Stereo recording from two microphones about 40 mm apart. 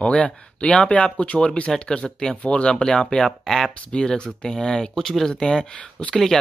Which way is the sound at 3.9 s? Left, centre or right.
Left.